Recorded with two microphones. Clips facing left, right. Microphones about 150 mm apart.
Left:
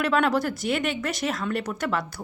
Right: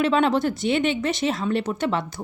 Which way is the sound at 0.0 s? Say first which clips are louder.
Right 3 dB; 25° right (ahead or behind).